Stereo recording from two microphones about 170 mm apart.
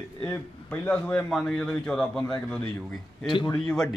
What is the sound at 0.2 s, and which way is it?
A man's voice, 10° left (ahead or behind).